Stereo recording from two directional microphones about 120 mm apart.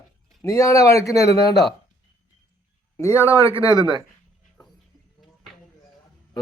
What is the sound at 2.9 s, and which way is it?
Speech, 25° left (ahead or behind).